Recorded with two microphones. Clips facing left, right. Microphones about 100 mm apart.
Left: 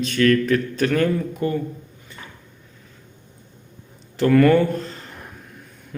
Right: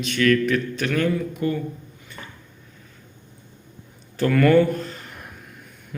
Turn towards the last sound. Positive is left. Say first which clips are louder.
# even
turn(degrees=25)  # may be behind; listen again after turning